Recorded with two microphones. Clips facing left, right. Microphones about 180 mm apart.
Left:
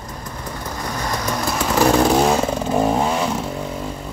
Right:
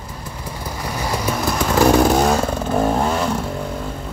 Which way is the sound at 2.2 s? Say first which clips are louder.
Even; 5° left (ahead or behind).